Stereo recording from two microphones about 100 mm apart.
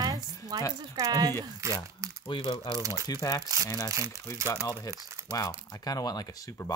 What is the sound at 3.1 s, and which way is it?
Speech, 35° left (ahead or behind).